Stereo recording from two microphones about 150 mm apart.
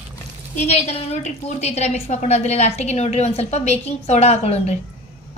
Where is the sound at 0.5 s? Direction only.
50° left (ahead or behind).